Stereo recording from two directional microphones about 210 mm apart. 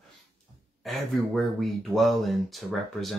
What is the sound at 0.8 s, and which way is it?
Speech, centre (ahead or behind).